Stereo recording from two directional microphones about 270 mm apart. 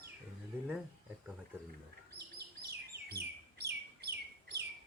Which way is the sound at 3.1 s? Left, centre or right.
Right.